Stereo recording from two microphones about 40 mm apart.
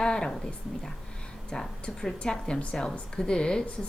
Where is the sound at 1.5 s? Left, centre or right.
Centre.